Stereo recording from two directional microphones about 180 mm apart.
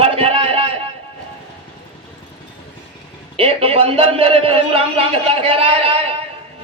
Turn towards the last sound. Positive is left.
turn(degrees=-30)  # may be behind; listen again after turning